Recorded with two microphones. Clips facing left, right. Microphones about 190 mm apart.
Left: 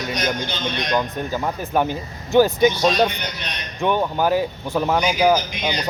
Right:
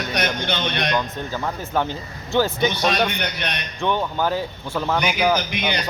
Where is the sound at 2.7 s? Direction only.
60° right (ahead or behind).